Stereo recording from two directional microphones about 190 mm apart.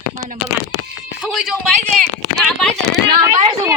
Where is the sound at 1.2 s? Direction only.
5° right (ahead or behind).